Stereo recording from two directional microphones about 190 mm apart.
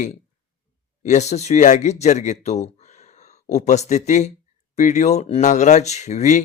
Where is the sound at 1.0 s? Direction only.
35° left (ahead or behind).